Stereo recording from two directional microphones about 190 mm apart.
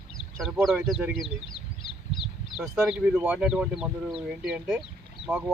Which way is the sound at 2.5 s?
Centre (ahead or behind).